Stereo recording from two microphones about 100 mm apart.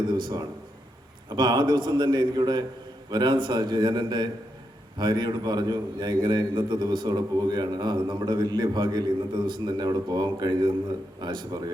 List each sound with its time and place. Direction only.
0.1 s a man's voice: 50° right (ahead or behind)